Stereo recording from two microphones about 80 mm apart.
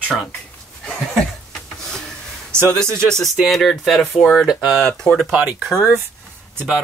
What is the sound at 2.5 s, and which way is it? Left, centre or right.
Speech, right.